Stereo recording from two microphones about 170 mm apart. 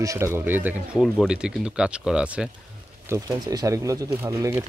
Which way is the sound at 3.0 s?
20° right (ahead or behind).